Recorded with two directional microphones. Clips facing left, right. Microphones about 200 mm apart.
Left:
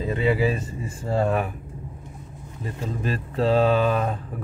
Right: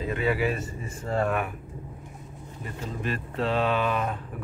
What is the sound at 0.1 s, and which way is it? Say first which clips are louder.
Speech: left 4 dB; 30° left (ahead or behind).